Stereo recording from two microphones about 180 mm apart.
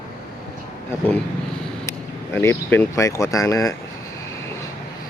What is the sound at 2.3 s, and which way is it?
Speech, 10° left (ahead or behind).